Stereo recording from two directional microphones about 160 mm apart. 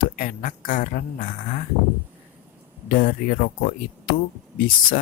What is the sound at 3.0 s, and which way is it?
Speech, 65° left (ahead or behind).